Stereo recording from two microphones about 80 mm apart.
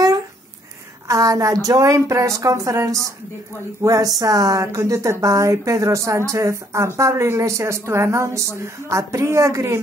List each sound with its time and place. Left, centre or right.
1.0 s a woman's voice: right